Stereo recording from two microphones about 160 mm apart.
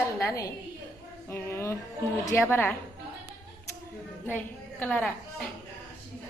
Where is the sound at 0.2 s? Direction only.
20° left (ahead or behind).